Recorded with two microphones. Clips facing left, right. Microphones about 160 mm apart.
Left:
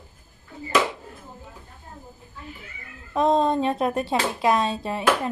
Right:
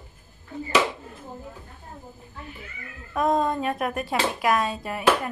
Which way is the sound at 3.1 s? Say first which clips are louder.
Left 3 dB; 25° left (ahead or behind).